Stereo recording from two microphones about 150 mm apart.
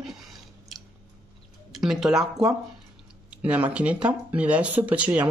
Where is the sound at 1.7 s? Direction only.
Centre (ahead or behind).